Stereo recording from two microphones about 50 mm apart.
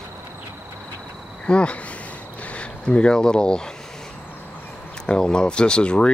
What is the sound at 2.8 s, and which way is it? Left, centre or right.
Speech, centre.